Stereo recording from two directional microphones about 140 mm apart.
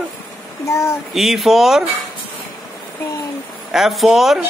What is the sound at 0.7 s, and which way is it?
Speech, 20° left (ahead or behind).